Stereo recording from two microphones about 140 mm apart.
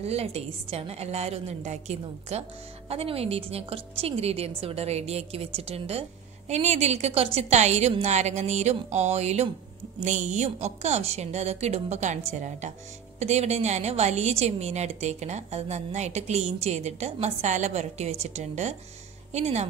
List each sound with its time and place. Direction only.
0.0 s a woman's voice: 50° right (ahead or behind)